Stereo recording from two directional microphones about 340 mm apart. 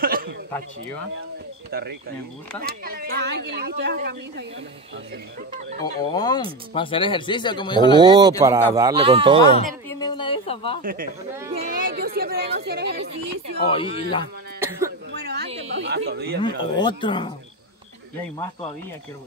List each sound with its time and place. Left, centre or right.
0.0 s a sound: right
1.7 s speech: right
6.1 s speech: centre
8.0 s speech: centre
9.8 s speech: centre
10.8 s speech: right
13.6 s speech: centre
14.6 s speech: centre
15.1 s speech: right
16.4 s speech: centre